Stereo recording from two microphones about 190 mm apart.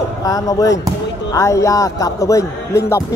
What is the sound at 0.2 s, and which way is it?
Speech, 20° left (ahead or behind).